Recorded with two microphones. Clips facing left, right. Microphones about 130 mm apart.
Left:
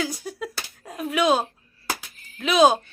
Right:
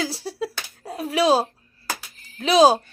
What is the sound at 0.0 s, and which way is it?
Finger snapping, 30° right (ahead or behind).